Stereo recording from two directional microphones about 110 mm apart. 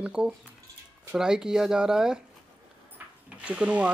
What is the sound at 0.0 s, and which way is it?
Speech, 5° right (ahead or behind).